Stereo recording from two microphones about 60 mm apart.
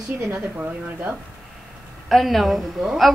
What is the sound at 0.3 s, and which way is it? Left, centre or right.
Speech, right.